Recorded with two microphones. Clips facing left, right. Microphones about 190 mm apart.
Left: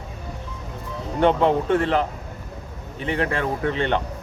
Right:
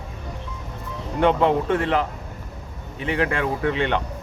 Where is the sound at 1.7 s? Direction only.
35° left (ahead or behind).